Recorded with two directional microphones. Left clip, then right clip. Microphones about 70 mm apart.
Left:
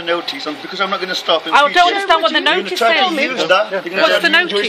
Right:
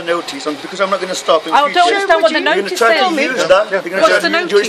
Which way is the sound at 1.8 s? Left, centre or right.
Left.